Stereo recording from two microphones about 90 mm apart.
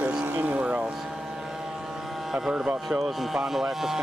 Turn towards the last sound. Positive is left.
turn(degrees=-5)  # may be behind; listen again after turning